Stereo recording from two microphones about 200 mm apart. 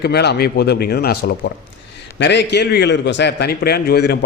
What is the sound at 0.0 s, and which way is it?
A man's voice, 55° left (ahead or behind).